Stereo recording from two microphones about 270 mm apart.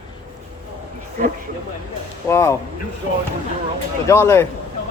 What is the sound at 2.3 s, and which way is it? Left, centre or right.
Speech, centre.